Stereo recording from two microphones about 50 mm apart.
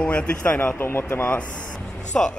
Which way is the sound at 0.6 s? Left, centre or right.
Left.